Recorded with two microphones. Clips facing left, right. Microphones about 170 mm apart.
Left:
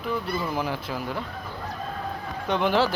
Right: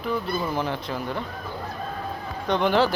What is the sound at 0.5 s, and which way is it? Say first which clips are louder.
Speech: right 1 dB; 5° left (ahead or behind).